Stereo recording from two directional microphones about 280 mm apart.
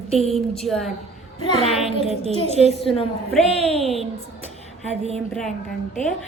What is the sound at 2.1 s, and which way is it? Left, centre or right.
Speech, right.